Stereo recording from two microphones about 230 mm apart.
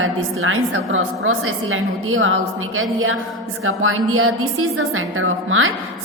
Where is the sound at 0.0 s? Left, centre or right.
Right.